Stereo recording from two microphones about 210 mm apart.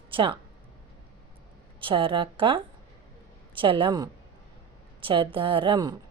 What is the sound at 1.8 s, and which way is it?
A woman's voice, 25° right (ahead or behind).